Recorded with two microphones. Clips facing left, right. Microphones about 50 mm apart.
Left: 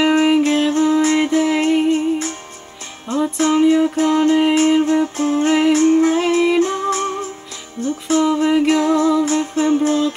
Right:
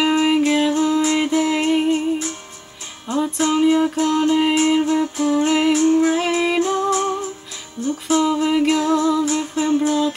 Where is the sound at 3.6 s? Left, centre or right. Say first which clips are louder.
Left 2 dB; centre.